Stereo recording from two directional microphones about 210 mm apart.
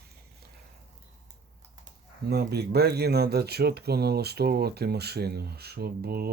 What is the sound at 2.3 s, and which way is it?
Speech, 50° right (ahead or behind).